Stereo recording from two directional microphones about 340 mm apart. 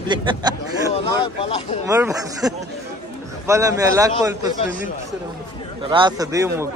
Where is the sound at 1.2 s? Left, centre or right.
Centre.